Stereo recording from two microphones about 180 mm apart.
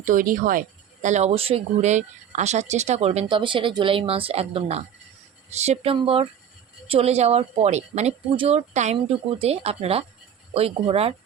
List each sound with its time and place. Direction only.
0.0 s speech: 45° right (ahead or behind)
1.0 s speech: 40° right (ahead or behind)